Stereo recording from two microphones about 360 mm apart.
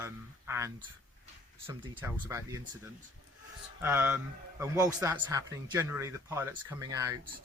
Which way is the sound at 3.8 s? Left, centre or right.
Centre.